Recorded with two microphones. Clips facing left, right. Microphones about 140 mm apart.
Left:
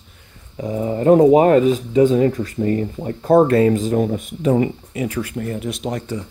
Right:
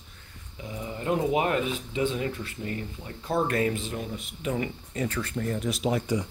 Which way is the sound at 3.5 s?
35° left (ahead or behind).